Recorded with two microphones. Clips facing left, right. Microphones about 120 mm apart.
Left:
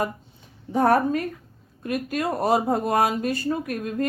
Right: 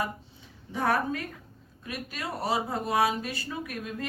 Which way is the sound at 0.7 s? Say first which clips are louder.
Left 8 dB; 45° left (ahead or behind).